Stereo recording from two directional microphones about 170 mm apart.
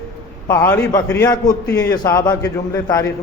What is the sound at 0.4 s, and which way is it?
A man's voice, 15° left (ahead or behind).